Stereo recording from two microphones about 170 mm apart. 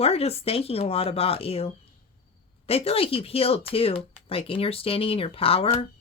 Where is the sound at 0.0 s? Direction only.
35° left (ahead or behind).